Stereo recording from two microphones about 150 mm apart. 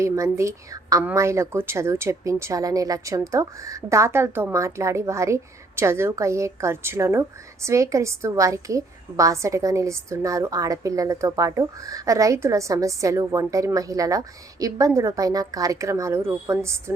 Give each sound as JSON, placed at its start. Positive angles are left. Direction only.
{"t": 0.0, "sound": "a woman's voice", "side_deg": -20}